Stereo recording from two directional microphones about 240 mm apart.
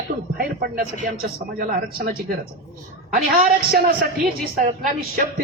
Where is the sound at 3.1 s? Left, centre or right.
Right.